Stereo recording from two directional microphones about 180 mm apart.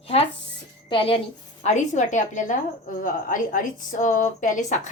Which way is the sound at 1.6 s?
40° left (ahead or behind).